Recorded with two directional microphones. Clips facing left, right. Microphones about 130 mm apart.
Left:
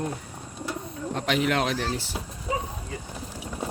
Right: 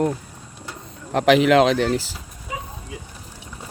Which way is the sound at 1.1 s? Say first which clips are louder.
Right 10 dB; 90° right.